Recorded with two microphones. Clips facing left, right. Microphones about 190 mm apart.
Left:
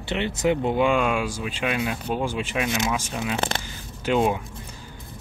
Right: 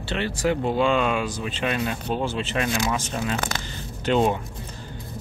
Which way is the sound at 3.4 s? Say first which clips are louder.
Left 2 dB; 25° left (ahead or behind).